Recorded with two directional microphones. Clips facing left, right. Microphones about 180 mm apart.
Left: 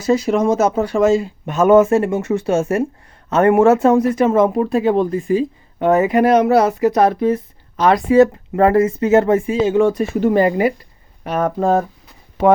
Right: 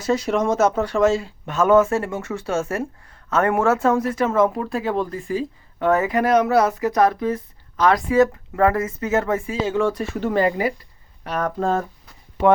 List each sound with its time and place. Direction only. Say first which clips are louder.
0.0 s speech: left 5 dB; 10° left (ahead or behind)